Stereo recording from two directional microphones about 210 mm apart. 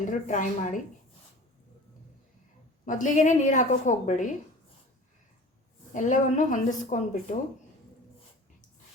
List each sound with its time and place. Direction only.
0.1 s a woman's voice: 35° left (ahead or behind)
2.8 s a woman's voice: 35° left (ahead or behind)
5.9 s a woman's voice: 35° left (ahead or behind)